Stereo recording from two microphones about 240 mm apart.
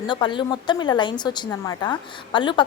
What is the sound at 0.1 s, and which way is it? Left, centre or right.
A woman's voice, centre.